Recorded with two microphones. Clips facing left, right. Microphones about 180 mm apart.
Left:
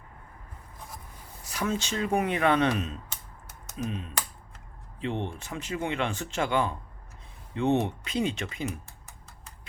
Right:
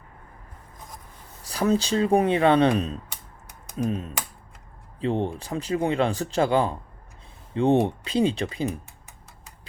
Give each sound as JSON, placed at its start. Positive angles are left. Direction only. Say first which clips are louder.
{"t": 1.5, "sound": "speech", "louder": "right 8 dB", "side_deg": -35}